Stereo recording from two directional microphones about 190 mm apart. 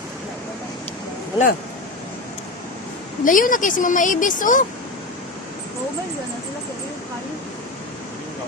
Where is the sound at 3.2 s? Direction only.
45° left (ahead or behind).